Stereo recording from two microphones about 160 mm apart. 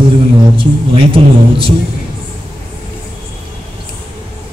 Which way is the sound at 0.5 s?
35° right (ahead or behind).